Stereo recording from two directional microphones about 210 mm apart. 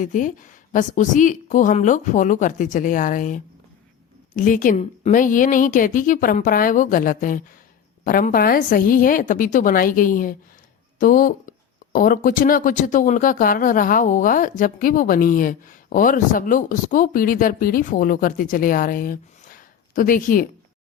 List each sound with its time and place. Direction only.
0.0 s speech: 40° left (ahead or behind)